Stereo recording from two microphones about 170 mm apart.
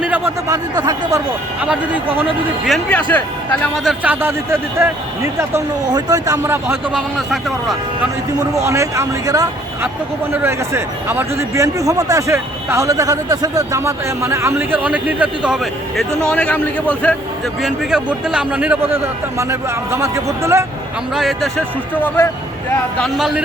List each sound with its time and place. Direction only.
0.0 s speech: 10° right (ahead or behind)
1.6 s a man's voice: 5° right (ahead or behind)
3.8 s a man's voice: 10° right (ahead or behind)
6.9 s a man's voice: centre (ahead or behind)
8.4 s a man's voice: 15° right (ahead or behind)
21.2 s a man's voice: centre (ahead or behind)
22.0 s speech: 10° left (ahead or behind)
23.0 s a man's voice: centre (ahead or behind)